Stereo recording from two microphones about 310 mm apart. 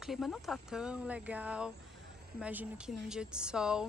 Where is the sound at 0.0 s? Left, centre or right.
Centre.